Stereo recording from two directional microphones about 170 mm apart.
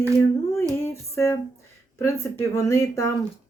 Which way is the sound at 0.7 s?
15° left (ahead or behind).